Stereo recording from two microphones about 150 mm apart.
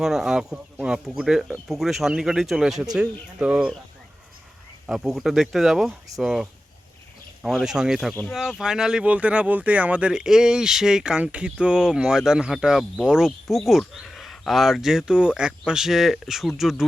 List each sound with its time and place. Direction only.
0.0 s speech: 5° right (ahead or behind)
4.9 s speech: centre (ahead or behind)